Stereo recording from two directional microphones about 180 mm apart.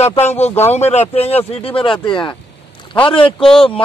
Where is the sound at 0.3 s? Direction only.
35° left (ahead or behind).